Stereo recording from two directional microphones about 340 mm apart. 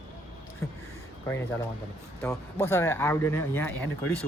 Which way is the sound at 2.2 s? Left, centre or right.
Centre.